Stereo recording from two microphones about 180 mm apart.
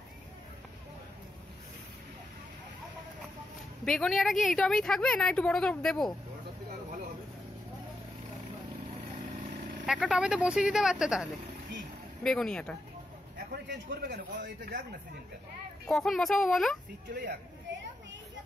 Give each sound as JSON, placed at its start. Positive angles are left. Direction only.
{"t": 3.8, "sound": "a woman's voice", "side_deg": 5}
{"t": 9.8, "sound": "a woman's voice", "side_deg": 0}
{"t": 14.0, "sound": "speech", "side_deg": -75}
{"t": 15.9, "sound": "a woman's voice", "side_deg": 0}
{"t": 17.1, "sound": "speech", "side_deg": -60}